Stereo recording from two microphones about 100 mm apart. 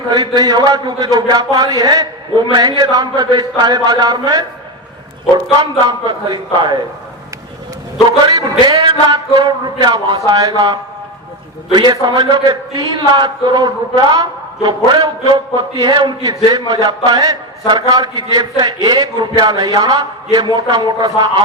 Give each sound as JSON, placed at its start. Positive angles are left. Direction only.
{"t": 0.1, "sound": "a man's voice", "side_deg": -40}
{"t": 5.8, "sound": "a man's voice", "side_deg": -45}
{"t": 8.3, "sound": "speech", "side_deg": -40}
{"t": 11.9, "sound": "a man's voice", "side_deg": -45}